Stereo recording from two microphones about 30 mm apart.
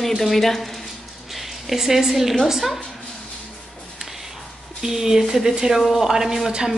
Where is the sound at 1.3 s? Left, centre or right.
Centre.